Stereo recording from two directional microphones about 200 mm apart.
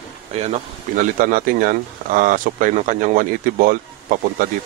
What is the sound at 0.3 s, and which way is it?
Speech, 35° right (ahead or behind).